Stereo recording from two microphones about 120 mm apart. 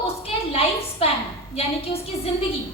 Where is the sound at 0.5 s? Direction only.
55° left (ahead or behind).